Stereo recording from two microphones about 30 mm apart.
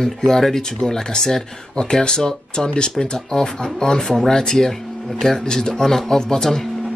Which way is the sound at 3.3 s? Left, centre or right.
Centre.